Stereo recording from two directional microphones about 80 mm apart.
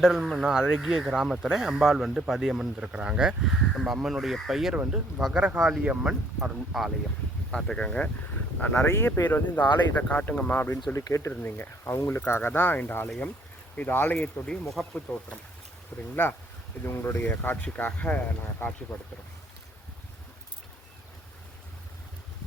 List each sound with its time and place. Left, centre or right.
0.0 s speech: centre
4.8 s speech: centre
7.5 s speech: centre
10.9 s speech: left
11.3 s speech: left
18.6 s speech: left